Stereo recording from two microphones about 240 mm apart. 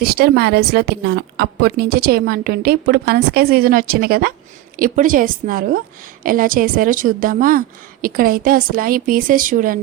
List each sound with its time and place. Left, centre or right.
0.0 s a woman's voice: right